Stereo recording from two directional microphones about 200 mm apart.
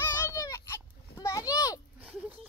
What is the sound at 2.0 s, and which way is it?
Speech, 5° right (ahead or behind).